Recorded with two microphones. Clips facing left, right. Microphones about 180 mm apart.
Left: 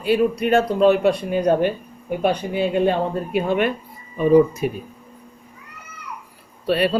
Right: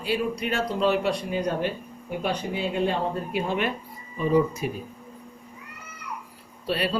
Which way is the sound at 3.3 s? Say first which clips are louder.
Left 9 dB; 55° left (ahead or behind).